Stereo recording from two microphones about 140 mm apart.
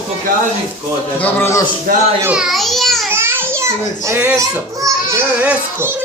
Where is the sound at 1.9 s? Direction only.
90° right.